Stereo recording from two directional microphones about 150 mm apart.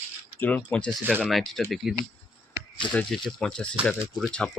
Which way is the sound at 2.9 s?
Centre (ahead or behind).